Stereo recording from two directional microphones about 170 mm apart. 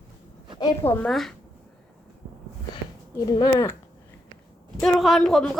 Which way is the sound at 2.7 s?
25° left (ahead or behind).